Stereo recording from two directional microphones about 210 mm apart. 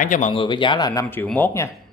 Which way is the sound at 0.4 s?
25° left (ahead or behind).